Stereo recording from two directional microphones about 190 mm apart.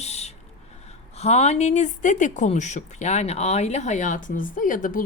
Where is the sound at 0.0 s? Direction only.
35° left (ahead or behind).